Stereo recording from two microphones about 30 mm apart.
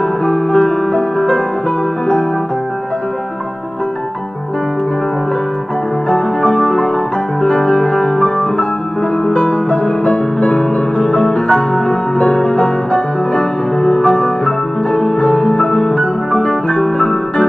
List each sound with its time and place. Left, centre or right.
0.2 s music: left
6.0 s music: left